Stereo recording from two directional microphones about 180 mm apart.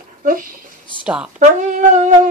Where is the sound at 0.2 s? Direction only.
50° right (ahead or behind).